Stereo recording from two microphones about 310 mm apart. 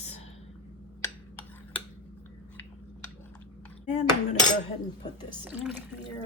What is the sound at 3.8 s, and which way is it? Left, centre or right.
Speech, left.